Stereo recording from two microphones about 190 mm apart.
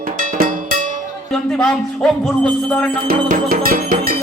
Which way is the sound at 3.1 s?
50° right (ahead or behind).